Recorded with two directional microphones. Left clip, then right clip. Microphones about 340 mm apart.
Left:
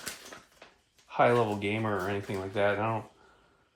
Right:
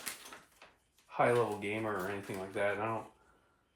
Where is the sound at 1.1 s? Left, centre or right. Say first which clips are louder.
Left 5 dB; left.